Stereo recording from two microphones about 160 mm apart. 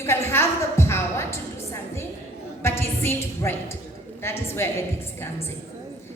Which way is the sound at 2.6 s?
15° left (ahead or behind).